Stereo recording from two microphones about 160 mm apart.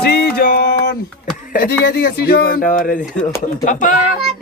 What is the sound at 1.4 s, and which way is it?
A woman's voice, 75° left (ahead or behind).